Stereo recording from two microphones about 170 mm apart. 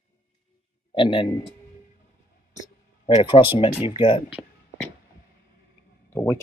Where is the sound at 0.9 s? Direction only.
30° left (ahead or behind).